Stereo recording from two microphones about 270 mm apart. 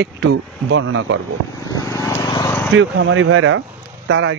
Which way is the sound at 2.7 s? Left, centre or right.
Right.